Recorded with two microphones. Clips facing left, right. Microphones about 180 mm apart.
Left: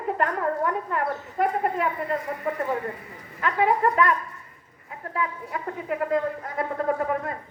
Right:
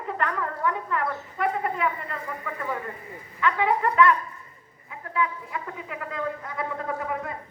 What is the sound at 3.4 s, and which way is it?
A woman's voice, 45° left (ahead or behind).